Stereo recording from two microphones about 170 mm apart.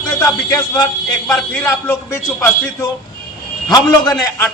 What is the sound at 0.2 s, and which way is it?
Speech, 20° left (ahead or behind).